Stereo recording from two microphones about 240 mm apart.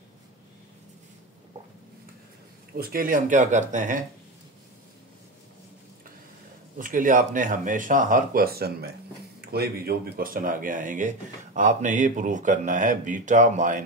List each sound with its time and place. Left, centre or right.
2.8 s speech: right
6.8 s speech: right